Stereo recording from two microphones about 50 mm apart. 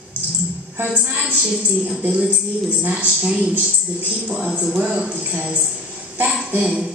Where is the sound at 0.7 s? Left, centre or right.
Right.